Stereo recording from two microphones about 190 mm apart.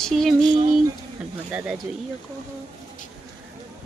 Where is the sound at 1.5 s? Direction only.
5° right (ahead or behind).